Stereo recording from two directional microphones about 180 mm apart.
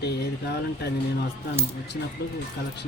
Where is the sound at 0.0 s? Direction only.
65° left (ahead or behind).